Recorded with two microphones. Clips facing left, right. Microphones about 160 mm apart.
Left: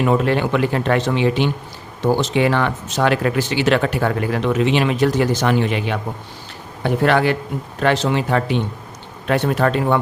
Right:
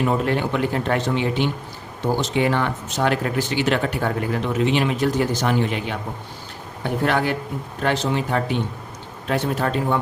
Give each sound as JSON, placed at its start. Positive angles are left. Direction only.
{"t": 0.0, "sound": "speech", "side_deg": 90}
{"t": 9.2, "sound": "speech", "side_deg": 75}